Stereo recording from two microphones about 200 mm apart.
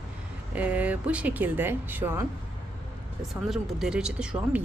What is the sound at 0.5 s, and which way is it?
Speech, 5° right (ahead or behind).